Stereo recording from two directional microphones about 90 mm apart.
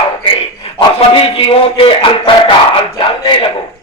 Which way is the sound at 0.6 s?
85° left.